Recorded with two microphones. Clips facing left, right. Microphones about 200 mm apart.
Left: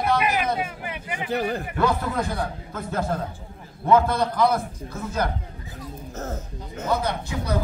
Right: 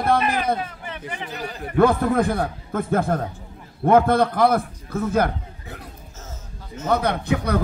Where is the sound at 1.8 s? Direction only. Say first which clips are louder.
Right 8 dB; 55° right (ahead or behind).